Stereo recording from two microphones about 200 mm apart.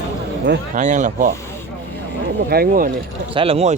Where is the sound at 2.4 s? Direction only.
45° right (ahead or behind).